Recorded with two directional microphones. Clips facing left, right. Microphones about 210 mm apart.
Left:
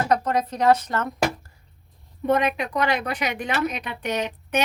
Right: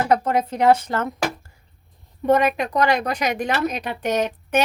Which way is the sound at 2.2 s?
40° right (ahead or behind).